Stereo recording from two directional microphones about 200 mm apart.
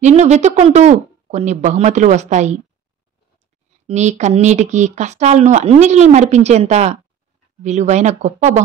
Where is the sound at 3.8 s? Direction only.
35° right (ahead or behind).